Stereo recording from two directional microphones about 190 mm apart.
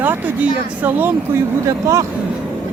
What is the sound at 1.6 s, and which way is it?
Speech, 15° right (ahead or behind).